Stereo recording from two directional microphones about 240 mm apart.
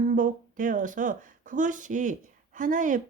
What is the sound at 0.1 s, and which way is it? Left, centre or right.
Speech, right.